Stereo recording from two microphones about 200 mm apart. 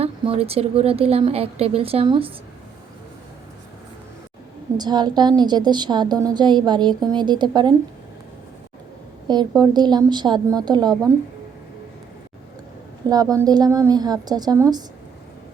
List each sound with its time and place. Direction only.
0.0 s a woman's voice: 30° right (ahead or behind)
4.8 s a woman's voice: 20° right (ahead or behind)
9.2 s a woman's voice: 20° right (ahead or behind)
13.1 s a woman's voice: 20° right (ahead or behind)